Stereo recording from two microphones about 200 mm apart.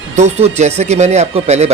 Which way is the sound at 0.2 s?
35° right (ahead or behind).